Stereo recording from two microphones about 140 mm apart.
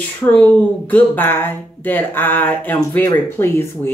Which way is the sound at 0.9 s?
15° left (ahead or behind).